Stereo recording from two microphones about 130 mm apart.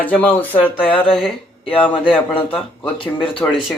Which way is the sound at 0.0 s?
10° left (ahead or behind).